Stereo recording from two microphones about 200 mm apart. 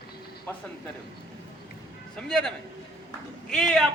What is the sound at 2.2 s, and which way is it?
Speech, 5° left (ahead or behind).